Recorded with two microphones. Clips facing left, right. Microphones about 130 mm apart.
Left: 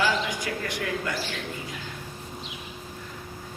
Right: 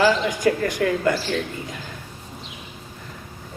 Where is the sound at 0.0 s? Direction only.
50° right (ahead or behind).